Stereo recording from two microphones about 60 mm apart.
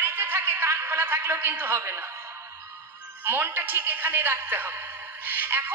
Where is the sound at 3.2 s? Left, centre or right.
Right.